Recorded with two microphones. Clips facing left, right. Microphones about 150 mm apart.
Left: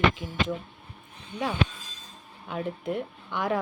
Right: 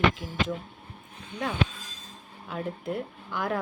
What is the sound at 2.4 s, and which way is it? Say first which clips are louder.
Speech: left 2 dB; centre (ahead or behind).